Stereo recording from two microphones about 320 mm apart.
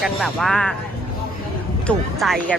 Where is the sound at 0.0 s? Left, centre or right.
Centre.